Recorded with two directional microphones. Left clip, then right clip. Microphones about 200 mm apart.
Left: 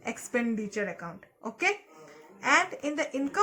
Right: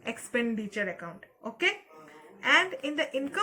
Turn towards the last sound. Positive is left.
turn(degrees=40)  # may be behind; listen again after turning